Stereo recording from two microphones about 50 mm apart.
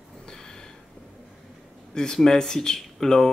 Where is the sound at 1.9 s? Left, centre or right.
Centre.